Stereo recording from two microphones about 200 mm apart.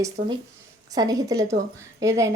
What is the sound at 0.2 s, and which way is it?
Speech, 45° right (ahead or behind).